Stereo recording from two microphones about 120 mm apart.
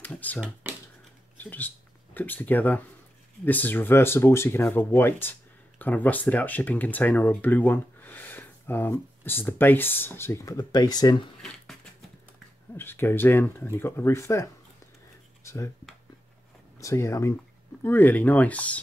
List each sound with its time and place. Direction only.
0.0 s computer keyboard: 15° left (ahead or behind)
1.4 s speech: 15° left (ahead or behind); by 11.2 s 35° left (ahead or behind)
12.7 s speech: 20° left (ahead or behind)
15.4 s a sound: 25° left (ahead or behind)
16.8 s speech: 25° left (ahead or behind)